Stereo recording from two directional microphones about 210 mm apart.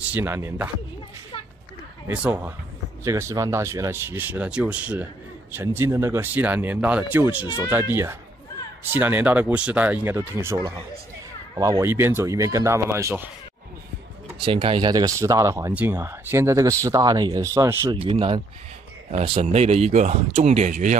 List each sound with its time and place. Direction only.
0.1 s speech: 10° right (ahead or behind)
2.0 s speech: 5° right (ahead or behind)
7.4 s speech: 15° left (ahead or behind)
7.9 s speech: 10° right (ahead or behind)
14.4 s speech: 25° right (ahead or behind)